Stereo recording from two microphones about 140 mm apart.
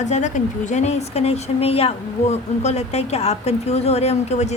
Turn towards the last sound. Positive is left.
turn(degrees=50)  # may be behind; listen again after turning